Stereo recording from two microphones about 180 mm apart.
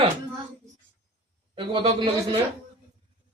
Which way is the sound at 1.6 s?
25° right (ahead or behind).